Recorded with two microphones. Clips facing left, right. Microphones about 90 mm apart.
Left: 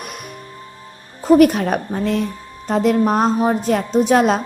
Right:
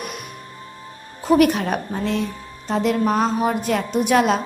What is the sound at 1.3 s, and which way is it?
A woman's voice, 40° left (ahead or behind).